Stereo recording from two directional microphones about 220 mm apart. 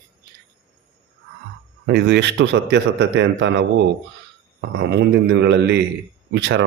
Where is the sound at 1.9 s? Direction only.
50° right (ahead or behind).